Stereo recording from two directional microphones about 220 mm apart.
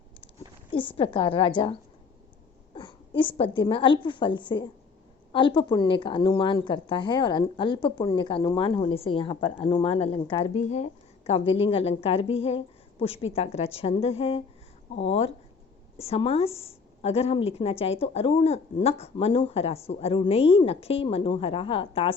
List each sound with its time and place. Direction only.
0.9 s a woman's voice: 25° left (ahead or behind)